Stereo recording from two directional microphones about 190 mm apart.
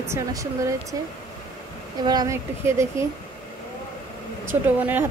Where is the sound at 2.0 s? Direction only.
20° right (ahead or behind).